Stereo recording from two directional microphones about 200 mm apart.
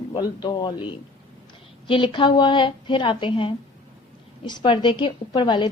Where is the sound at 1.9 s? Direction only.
25° left (ahead or behind).